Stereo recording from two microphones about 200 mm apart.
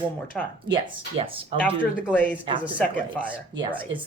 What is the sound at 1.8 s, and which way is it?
Speech, 5° right (ahead or behind).